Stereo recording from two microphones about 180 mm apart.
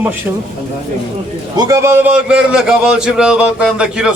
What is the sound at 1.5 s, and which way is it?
A man's voice, 20° right (ahead or behind).